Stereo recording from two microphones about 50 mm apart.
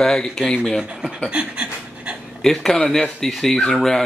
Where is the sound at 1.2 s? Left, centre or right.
Right.